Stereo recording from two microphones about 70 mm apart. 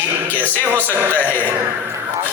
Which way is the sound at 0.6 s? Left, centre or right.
Right.